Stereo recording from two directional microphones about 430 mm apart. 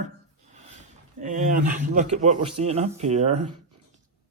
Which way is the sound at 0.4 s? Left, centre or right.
Centre.